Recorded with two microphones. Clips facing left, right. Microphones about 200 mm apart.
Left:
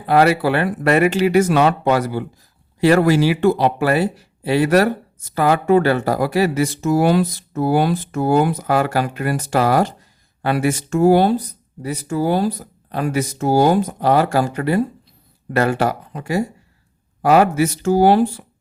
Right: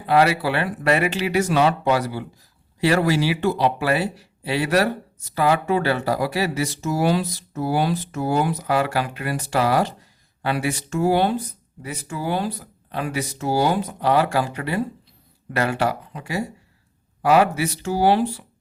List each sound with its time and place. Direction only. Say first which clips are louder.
0.0 s speech: left 4 dB; 45° left (ahead or behind)